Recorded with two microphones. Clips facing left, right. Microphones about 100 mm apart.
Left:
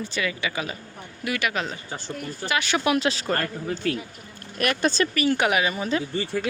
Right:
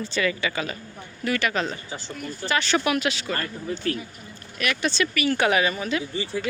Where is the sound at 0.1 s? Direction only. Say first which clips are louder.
Right 3 dB; 10° left (ahead or behind).